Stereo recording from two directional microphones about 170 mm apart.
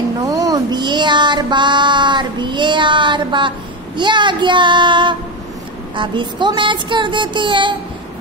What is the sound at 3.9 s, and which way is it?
A child's voice, 25° right (ahead or behind).